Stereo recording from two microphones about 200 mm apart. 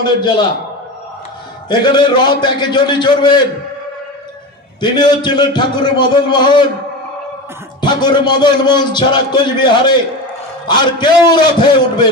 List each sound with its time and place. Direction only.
0.0 s a man's voice: 20° left (ahead or behind)
1.7 s a man's voice: 25° left (ahead or behind)
4.7 s a man's voice: 25° left (ahead or behind)
7.8 s a man's voice: 20° left (ahead or behind)